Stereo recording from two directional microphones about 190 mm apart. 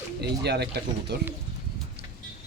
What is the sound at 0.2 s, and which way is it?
Speech, 60° right (ahead or behind).